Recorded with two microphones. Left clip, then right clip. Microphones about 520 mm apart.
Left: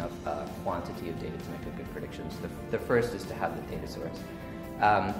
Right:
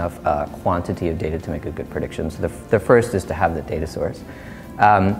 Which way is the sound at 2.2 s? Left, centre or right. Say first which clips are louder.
Right 14 dB; right.